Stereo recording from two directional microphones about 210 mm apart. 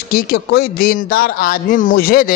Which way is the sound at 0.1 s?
45° left (ahead or behind).